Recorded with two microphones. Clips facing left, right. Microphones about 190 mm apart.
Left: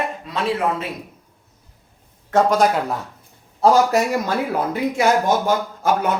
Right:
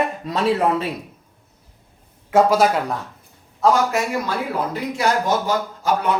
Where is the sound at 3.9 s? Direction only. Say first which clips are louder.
Left 3 dB; 40° left (ahead or behind).